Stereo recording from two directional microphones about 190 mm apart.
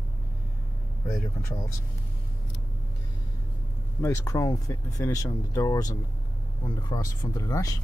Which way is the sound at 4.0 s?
15° left (ahead or behind).